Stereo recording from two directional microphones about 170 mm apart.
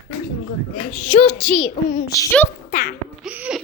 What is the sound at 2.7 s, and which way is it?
Speech, 55° left (ahead or behind).